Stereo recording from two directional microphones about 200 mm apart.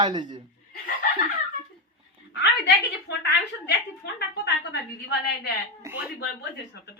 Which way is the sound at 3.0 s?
55° left (ahead or behind).